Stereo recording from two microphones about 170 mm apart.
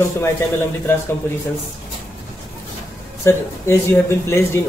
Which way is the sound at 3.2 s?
15° left (ahead or behind).